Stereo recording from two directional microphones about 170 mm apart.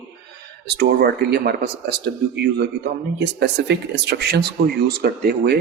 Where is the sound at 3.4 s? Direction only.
75° right (ahead or behind).